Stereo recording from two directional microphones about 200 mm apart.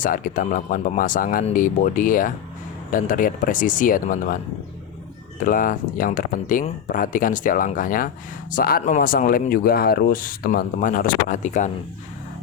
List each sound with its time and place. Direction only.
0.0 s speech: 40° left (ahead or behind)
5.4 s speech: 45° left (ahead or behind)